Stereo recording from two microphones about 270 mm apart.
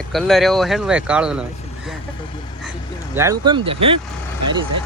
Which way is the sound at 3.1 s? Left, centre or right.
Centre.